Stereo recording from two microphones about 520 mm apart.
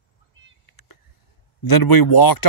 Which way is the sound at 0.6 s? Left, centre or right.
Left.